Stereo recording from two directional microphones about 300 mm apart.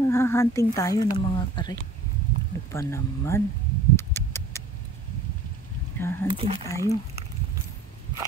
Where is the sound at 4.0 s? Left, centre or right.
Centre.